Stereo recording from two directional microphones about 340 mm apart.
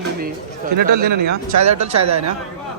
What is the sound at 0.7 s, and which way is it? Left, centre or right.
Speech, right.